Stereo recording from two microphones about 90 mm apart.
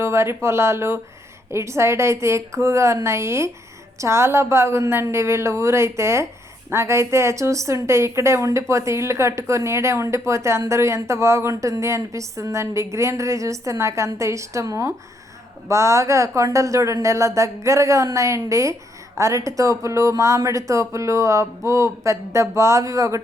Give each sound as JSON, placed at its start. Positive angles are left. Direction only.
{"t": 0.0, "sound": "speech", "side_deg": -30}